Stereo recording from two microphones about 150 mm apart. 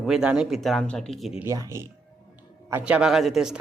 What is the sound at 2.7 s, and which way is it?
Speech, 10° right (ahead or behind).